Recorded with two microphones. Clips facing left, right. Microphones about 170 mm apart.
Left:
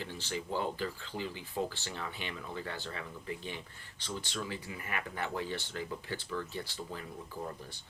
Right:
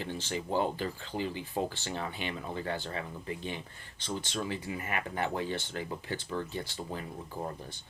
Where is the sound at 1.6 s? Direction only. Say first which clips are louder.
Right 2 dB; 30° right (ahead or behind).